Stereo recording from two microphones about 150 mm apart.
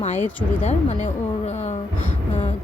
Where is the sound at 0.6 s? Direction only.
50° left (ahead or behind).